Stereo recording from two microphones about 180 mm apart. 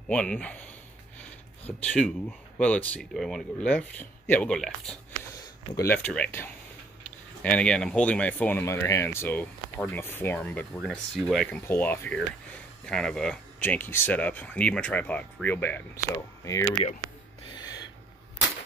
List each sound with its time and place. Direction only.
0.1 s speech: 5° left (ahead or behind)
1.9 s speech: 5° left (ahead or behind)
5.4 s speech: 15° left (ahead or behind)
17.5 s a sound: 20° left (ahead or behind)